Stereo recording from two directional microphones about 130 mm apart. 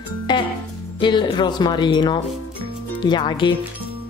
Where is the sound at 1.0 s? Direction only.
35° left (ahead or behind).